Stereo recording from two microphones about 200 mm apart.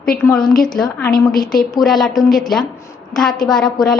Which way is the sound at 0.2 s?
10° left (ahead or behind).